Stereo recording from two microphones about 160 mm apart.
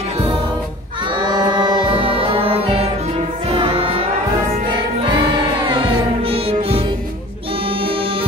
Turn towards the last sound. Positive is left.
turn(degrees=-35)  # may be behind; listen again after turning